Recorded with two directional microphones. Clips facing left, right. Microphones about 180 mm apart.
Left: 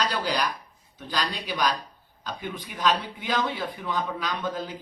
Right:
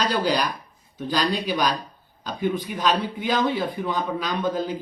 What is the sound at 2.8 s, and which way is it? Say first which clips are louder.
Speech: right 2 dB; 30° right (ahead or behind).